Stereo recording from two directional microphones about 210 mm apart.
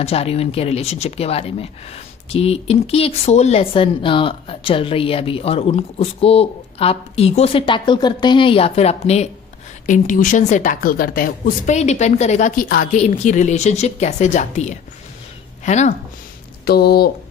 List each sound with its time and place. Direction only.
0.0 s speech: 30° left (ahead or behind)
16.6 s speech: 50° left (ahead or behind)